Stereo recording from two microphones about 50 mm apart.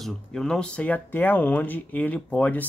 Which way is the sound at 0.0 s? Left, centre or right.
Centre.